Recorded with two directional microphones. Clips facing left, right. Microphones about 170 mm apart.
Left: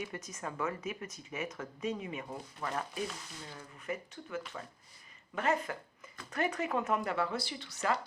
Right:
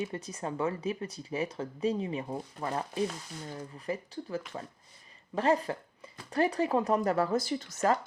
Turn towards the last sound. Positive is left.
turn(degrees=-45)  # may be behind; listen again after turning